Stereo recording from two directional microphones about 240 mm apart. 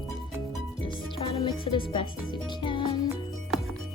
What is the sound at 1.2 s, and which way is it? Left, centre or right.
Music, left.